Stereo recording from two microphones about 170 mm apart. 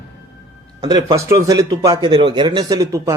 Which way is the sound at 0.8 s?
25° right (ahead or behind).